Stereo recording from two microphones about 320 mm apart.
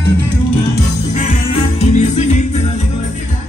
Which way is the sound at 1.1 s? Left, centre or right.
Left.